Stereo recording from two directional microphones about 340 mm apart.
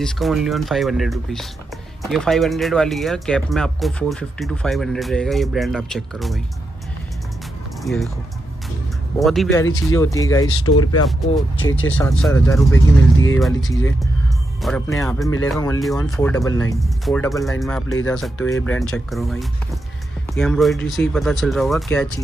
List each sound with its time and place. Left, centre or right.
0.0 s speech: centre
7.8 s speech: centre
9.2 s speech: centre
10.7 s speech: left
11.6 s speech: centre
12.7 s speech: left
13.4 s speech: centre